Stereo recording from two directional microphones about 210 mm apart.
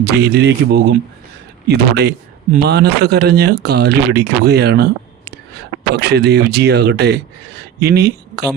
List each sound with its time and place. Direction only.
0.0 s speech: 55° right (ahead or behind)